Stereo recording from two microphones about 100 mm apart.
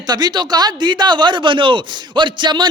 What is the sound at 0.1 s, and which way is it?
A man's voice, 45° right (ahead or behind).